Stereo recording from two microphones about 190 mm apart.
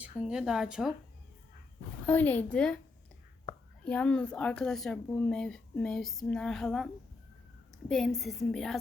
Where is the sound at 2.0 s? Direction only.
10° left (ahead or behind).